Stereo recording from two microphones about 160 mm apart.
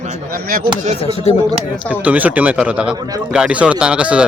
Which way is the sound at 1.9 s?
10° right (ahead or behind).